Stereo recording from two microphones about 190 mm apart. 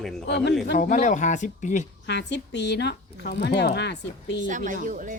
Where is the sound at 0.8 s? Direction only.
40° left (ahead or behind).